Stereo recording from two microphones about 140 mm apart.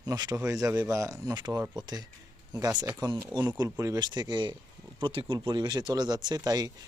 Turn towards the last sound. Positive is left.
turn(degrees=-25)  # may be behind; listen again after turning